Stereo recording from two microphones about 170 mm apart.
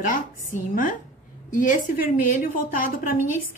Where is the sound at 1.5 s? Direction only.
50° left (ahead or behind).